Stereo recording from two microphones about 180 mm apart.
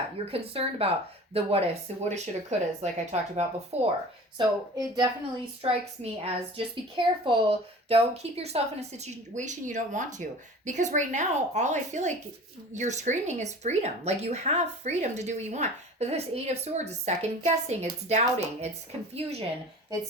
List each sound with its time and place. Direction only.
0.3 s speech: 30° right (ahead or behind)
4.4 s speech: 25° right (ahead or behind)
5.6 s speech: 35° right (ahead or behind)